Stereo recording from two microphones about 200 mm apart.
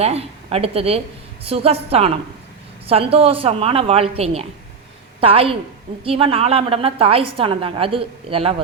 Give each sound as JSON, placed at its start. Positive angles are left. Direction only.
{"t": 0.0, "sound": "a woman's voice", "side_deg": -30}